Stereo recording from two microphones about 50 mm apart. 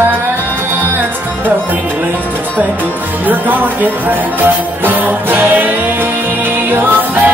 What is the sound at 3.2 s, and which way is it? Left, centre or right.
Music, right.